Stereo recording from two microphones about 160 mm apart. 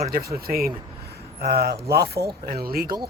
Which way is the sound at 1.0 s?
80° right.